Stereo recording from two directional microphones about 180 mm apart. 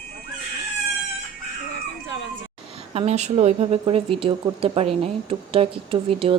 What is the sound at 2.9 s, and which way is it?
Speech, 40° right (ahead or behind).